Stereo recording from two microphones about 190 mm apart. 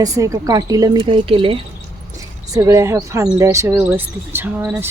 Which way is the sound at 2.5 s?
20° right (ahead or behind).